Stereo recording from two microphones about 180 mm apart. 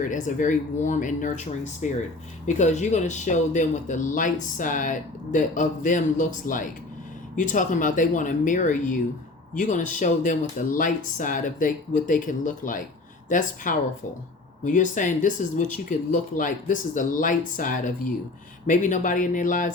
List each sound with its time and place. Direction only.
0.0 s speech: 45° left (ahead or behind)